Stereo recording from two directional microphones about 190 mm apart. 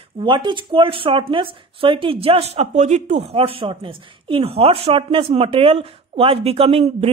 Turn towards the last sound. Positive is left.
turn(degrees=-30)  # may be behind; listen again after turning